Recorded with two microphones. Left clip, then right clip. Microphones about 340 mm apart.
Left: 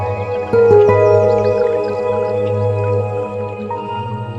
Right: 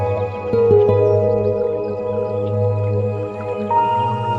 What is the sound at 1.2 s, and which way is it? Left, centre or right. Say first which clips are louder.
Music: left 4 dB; left.